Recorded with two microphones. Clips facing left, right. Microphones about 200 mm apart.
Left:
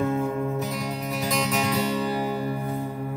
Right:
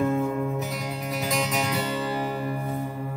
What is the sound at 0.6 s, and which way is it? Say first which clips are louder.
Music: left 2 dB; 5° right (ahead or behind).